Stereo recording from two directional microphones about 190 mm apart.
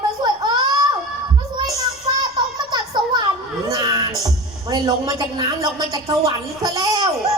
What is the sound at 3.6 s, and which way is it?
A man's voice, 20° right (ahead or behind).